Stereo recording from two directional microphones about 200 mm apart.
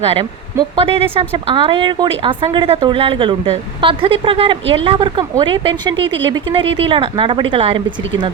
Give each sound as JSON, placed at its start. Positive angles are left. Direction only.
{"t": 0.8, "sound": "speech", "side_deg": -25}